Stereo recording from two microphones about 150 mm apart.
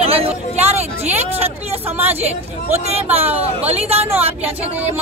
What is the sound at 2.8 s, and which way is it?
A woman's voice, 45° right (ahead or behind).